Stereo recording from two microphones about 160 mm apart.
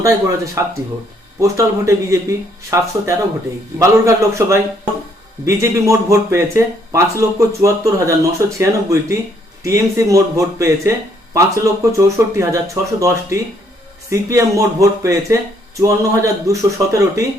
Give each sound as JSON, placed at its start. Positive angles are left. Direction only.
{"t": 0.0, "sound": "speech", "side_deg": -20}